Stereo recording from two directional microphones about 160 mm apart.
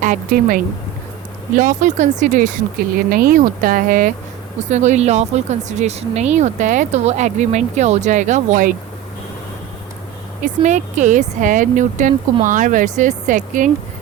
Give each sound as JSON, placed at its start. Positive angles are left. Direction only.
{"t": 0.0, "sound": "speech", "side_deg": -60}
{"t": 1.5, "sound": "speech", "side_deg": -50}
{"t": 3.1, "sound": "speech", "side_deg": -65}
{"t": 4.7, "sound": "speech", "side_deg": -45}
{"t": 10.4, "sound": "speech", "side_deg": -50}